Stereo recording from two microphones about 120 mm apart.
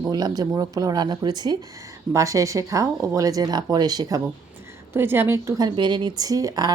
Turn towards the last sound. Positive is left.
turn(degrees=-30)  # may be behind; listen again after turning